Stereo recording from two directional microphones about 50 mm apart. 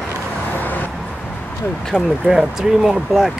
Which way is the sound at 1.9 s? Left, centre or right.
Centre.